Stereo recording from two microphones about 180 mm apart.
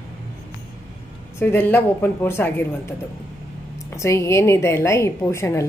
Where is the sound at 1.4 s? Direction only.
10° left (ahead or behind).